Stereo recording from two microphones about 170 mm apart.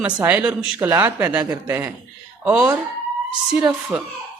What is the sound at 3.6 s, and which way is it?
Speech, 5° right (ahead or behind).